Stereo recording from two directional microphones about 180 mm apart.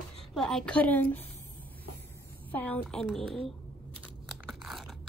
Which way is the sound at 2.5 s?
10° left (ahead or behind).